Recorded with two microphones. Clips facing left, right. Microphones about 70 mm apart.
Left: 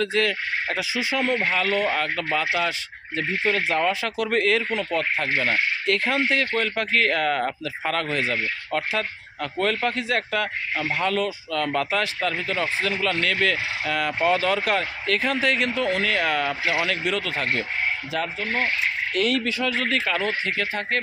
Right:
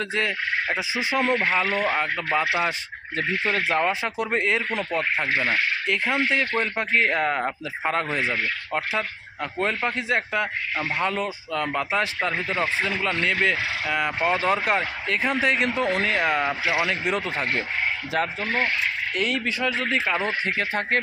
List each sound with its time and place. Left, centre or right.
0.0 s a man's voice: right
1.1 s speech: right
1.5 s a man's voice: right
3.2 s speech: right
3.8 s a man's voice: right
5.4 s speech: centre
6.1 s a man's voice: right
12.3 s a man's voice: right; by 17.0 s centre
17.0 s speech: right
18.4 s speech: right
19.1 s speech: centre
19.5 s a man's voice: right